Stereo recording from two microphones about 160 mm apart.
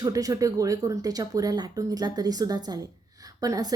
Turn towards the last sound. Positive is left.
turn(degrees=-20)  # may be behind; listen again after turning